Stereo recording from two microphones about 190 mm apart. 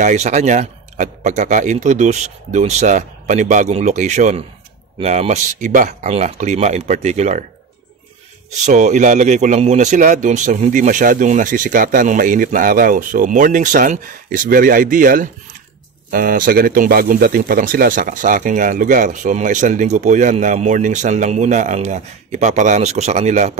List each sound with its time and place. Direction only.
0.0 s a man's voice: 40° right (ahead or behind)
8.6 s a man's voice: 40° right (ahead or behind)